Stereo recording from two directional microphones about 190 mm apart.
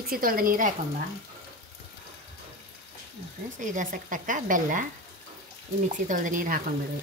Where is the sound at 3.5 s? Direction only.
40° right (ahead or behind).